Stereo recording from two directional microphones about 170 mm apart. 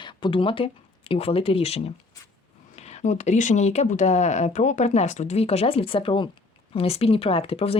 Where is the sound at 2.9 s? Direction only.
45° left (ahead or behind).